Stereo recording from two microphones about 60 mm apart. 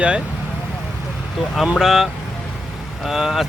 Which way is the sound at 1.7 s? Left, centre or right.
Centre.